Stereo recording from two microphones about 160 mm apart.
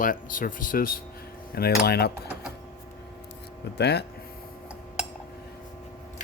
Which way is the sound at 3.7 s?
90° left.